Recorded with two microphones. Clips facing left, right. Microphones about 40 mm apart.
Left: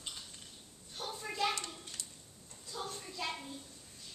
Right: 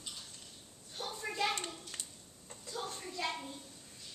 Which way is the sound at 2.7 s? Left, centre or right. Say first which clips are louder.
Right 1 dB; centre.